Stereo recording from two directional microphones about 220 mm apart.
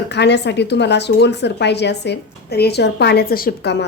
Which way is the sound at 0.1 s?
50° left (ahead or behind).